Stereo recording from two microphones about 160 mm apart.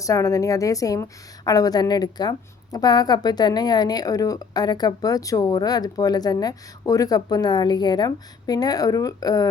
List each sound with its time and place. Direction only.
0.0 s a woman's voice: 20° left (ahead or behind)